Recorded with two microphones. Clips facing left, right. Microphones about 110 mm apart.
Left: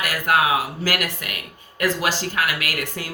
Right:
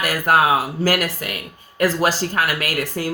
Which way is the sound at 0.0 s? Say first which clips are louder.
Right 3 dB; 40° right (ahead or behind).